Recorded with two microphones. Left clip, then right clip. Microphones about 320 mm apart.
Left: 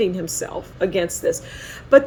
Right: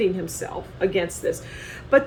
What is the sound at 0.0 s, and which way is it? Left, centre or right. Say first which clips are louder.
Speech: left 2 dB; left.